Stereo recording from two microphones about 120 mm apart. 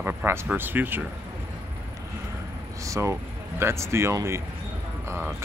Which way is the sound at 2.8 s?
25° right (ahead or behind).